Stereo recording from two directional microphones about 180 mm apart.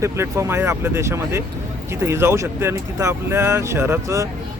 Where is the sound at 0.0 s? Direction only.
15° right (ahead or behind).